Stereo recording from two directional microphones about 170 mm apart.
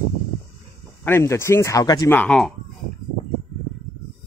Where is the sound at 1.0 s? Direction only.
15° left (ahead or behind).